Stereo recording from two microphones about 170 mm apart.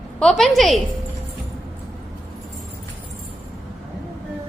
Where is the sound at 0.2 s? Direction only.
Centre (ahead or behind).